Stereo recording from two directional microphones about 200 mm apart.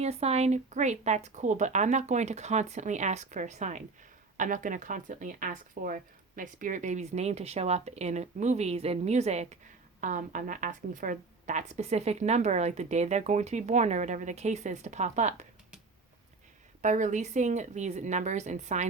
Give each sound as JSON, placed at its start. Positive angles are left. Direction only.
{"t": 0.0, "sound": "a woman's voice", "side_deg": -30}
{"t": 16.8, "sound": "a woman's voice", "side_deg": -40}